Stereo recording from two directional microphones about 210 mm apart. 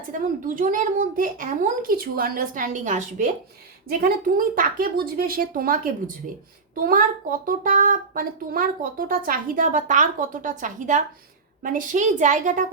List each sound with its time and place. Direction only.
0.1 s speech: 40° right (ahead or behind)